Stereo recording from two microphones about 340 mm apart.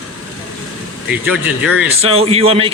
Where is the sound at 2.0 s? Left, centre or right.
Centre.